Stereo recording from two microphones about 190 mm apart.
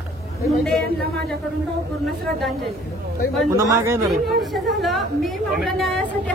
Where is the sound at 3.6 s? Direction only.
15° right (ahead or behind).